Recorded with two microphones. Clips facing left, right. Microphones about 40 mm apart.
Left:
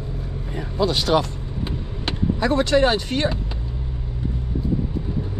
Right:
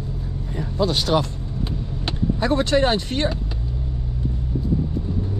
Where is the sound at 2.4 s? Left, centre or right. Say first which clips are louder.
Left 1 dB; left.